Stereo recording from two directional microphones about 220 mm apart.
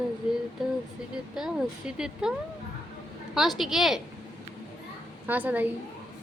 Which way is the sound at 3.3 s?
Centre (ahead or behind).